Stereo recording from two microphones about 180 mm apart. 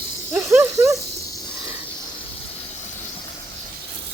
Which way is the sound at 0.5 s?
15° right (ahead or behind).